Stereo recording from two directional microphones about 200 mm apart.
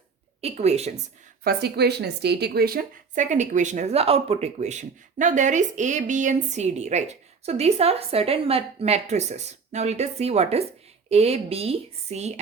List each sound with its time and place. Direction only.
0.4 s a woman's voice: 30° right (ahead or behind)
1.5 s a woman's voice: 55° right (ahead or behind); by 12.3 s 35° right (ahead or behind)